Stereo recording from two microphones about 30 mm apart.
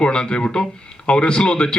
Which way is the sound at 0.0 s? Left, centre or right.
Left.